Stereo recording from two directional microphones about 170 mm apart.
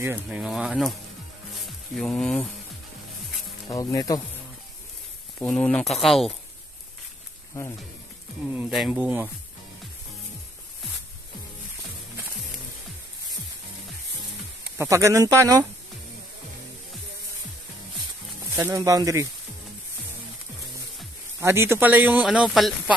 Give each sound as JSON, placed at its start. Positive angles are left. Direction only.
{"t": 0.0, "sound": "speech", "side_deg": -10}
{"t": 2.0, "sound": "speech", "side_deg": 5}
{"t": 3.6, "sound": "speech", "side_deg": 20}
{"t": 5.4, "sound": "speech", "side_deg": 5}
{"t": 8.5, "sound": "speech", "side_deg": -5}
{"t": 14.8, "sound": "speech", "side_deg": -15}
{"t": 18.5, "sound": "speech", "side_deg": -15}
{"t": 21.4, "sound": "speech", "side_deg": -15}